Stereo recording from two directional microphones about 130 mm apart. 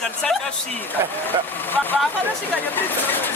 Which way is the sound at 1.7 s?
15° left (ahead or behind).